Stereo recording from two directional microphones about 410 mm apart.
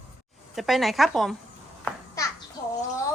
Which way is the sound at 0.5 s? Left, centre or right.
Centre.